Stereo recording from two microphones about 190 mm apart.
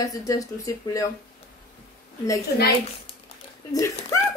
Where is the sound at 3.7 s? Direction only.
15° left (ahead or behind).